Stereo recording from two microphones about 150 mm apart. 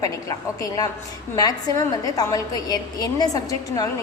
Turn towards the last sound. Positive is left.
turn(degrees=25)  # may be behind; listen again after turning